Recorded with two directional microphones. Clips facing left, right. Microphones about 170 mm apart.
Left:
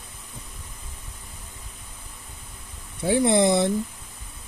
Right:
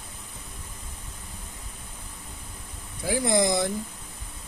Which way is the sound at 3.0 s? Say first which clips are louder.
Left 5 dB; 25° left (ahead or behind).